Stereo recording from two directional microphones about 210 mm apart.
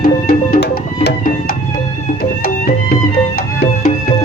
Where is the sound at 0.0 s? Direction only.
45° left (ahead or behind).